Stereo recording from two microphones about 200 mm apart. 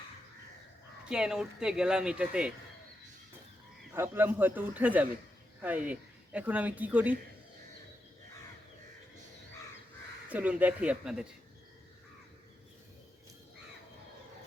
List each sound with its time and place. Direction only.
1.0 s speech: 5° right (ahead or behind)
3.9 s speech: 10° right (ahead or behind)
10.2 s speech: 5° right (ahead or behind)